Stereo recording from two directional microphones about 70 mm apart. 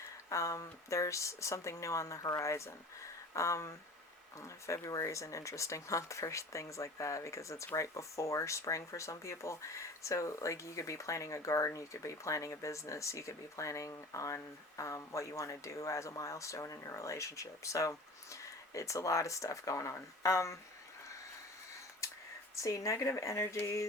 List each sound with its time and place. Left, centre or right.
0.3 s speech: left
22.5 s speech: left